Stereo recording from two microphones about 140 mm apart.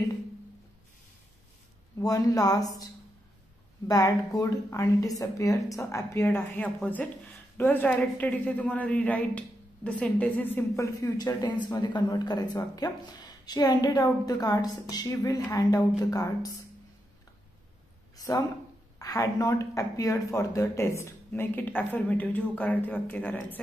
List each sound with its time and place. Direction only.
2.0 s speech: 25° left (ahead or behind)
11.0 s speech: 25° left (ahead or behind)
18.1 s a sound: 25° left (ahead or behind)
18.9 s speech: 25° left (ahead or behind)